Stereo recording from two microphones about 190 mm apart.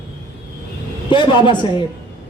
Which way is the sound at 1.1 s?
25° left (ahead or behind).